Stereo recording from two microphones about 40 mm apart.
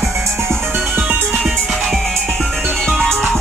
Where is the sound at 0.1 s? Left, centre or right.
Right.